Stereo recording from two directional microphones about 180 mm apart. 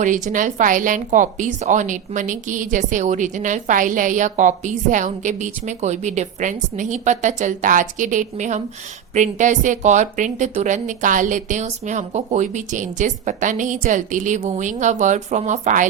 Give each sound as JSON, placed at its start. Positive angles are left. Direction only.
{"t": 0.0, "sound": "a woman's voice", "side_deg": -45}